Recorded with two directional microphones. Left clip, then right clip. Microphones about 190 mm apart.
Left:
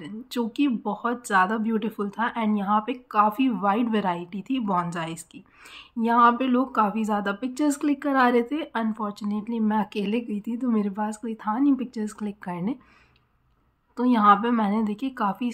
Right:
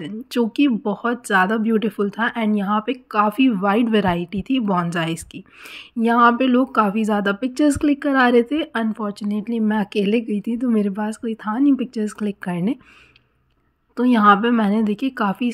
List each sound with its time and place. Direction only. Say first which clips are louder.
0.0 s speech: right 8 dB; 30° right (ahead or behind)
13.9 s speech: right 4 dB; 30° right (ahead or behind)